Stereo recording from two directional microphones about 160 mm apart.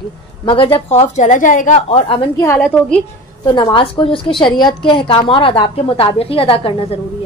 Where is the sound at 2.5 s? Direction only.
5° left (ahead or behind).